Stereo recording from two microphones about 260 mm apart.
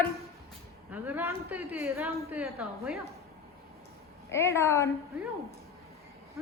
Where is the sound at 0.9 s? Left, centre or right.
Centre.